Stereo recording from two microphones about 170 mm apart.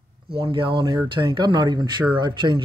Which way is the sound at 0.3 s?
30° right (ahead or behind).